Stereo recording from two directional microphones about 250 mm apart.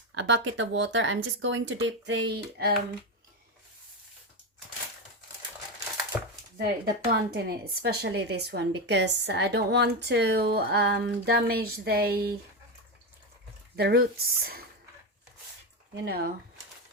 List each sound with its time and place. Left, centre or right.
0.1 s a woman's voice: right
6.6 s a woman's voice: right
13.7 s a woman's voice: right
16.0 s a woman's voice: right